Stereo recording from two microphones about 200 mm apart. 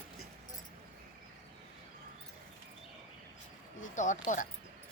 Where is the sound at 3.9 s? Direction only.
40° left (ahead or behind).